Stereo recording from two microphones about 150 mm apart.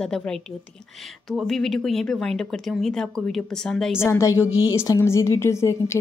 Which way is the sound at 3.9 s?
20° left (ahead or behind).